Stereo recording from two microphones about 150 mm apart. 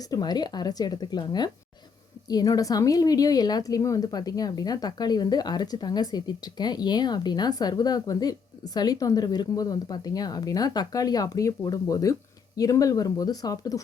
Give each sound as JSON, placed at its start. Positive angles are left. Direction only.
{"t": 0.0, "sound": "a woman's voice", "side_deg": 25}